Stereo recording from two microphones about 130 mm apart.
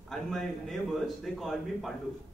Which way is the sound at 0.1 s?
Centre (ahead or behind).